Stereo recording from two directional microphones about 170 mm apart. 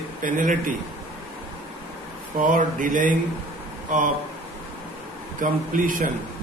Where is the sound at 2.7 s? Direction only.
50° right (ahead or behind).